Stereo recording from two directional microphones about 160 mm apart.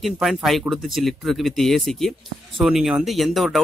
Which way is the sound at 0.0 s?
Centre (ahead or behind).